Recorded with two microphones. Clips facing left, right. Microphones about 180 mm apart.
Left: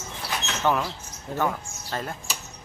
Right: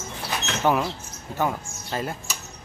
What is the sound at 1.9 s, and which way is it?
Speech, 10° right (ahead or behind).